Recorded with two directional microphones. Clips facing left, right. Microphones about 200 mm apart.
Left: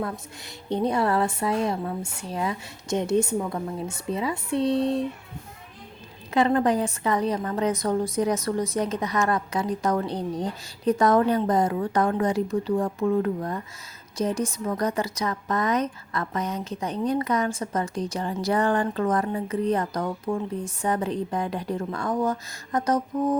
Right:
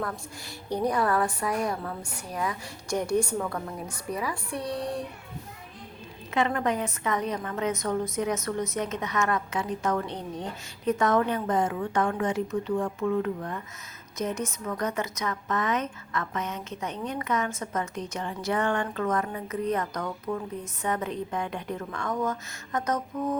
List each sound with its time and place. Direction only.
0.0 s a woman's voice: 25° left (ahead or behind)
6.3 s a woman's voice: 35° left (ahead or behind)